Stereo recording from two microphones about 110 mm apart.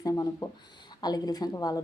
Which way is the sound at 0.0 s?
35° left (ahead or behind).